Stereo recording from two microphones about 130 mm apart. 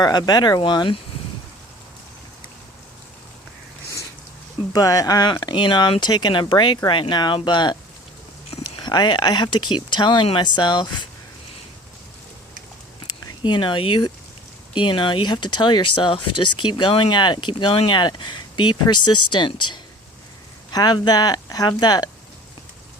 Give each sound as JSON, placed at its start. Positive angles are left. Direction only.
{"t": 0.0, "sound": "speech", "side_deg": 30}
{"t": 4.7, "sound": "speech", "side_deg": 30}
{"t": 8.8, "sound": "speech", "side_deg": 35}
{"t": 13.1, "sound": "speech", "side_deg": 35}